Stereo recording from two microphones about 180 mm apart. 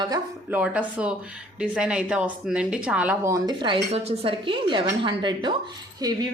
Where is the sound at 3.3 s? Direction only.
25° right (ahead or behind).